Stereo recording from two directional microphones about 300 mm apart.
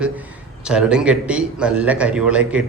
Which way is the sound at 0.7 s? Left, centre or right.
Centre.